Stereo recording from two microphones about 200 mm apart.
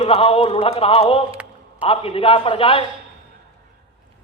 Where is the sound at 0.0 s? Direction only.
30° left (ahead or behind).